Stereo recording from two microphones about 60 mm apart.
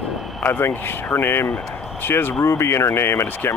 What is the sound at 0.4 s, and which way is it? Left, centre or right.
Speech, left.